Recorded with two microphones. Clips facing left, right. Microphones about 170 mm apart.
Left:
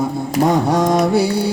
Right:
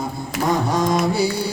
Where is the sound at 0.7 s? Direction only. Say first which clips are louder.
Left 5 dB; 70° left (ahead or behind).